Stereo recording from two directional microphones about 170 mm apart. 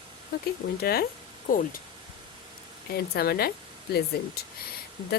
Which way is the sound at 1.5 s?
55° left (ahead or behind).